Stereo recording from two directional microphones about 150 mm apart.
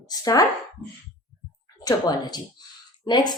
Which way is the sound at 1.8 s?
25° left (ahead or behind).